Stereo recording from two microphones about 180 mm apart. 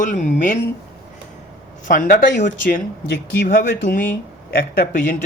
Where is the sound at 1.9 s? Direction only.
50° left (ahead or behind).